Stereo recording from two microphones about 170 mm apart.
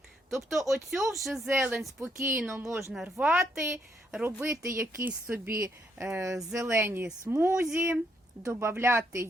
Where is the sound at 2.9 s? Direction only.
Centre (ahead or behind).